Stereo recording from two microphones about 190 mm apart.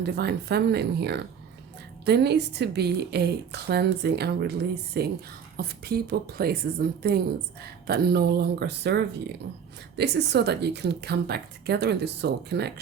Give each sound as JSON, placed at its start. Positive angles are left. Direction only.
{"t": 0.0, "sound": "a woman's voice", "side_deg": -60}